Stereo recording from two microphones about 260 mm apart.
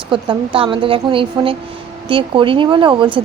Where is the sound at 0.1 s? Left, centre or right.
Centre.